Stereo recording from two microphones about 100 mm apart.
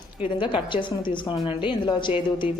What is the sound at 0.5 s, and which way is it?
A woman's voice, 55° left (ahead or behind).